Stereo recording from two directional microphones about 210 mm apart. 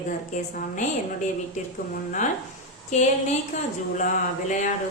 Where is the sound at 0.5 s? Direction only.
40° left (ahead or behind).